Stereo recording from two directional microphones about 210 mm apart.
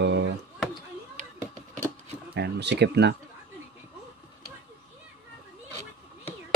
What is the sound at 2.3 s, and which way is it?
Speech, 50° right (ahead or behind).